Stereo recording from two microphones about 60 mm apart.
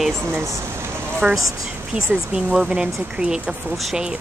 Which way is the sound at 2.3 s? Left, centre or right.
Right.